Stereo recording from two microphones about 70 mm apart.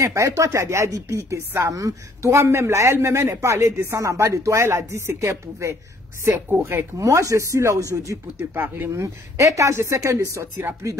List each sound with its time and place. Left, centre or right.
0.0 s speech: right
1.7 s a woman's voice: right
2.3 s a man's voice: right
6.5 s a man's voice: right
7.0 s speech: right
8.5 s a man's voice: right
8.9 s speech: right